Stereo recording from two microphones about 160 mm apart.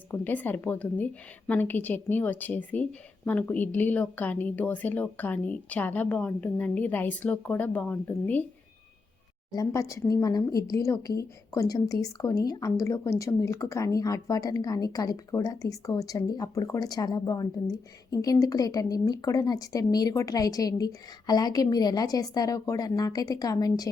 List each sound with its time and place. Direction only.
0.1 s a woman's voice: 10° left (ahead or behind)
9.5 s speech: 20° left (ahead or behind)